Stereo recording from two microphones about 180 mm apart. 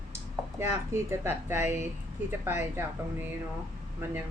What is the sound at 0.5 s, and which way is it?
Speech, 15° right (ahead or behind).